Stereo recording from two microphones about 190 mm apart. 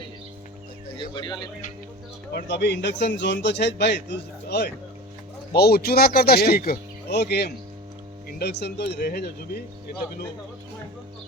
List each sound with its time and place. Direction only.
0.9 s speech: 25° left (ahead or behind)
2.3 s speech: 65° left (ahead or behind)